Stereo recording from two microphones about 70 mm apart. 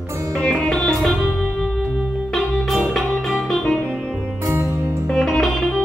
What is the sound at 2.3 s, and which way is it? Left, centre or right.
Music, centre.